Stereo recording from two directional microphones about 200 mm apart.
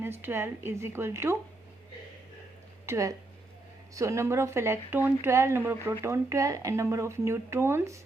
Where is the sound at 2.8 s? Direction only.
15° right (ahead or behind).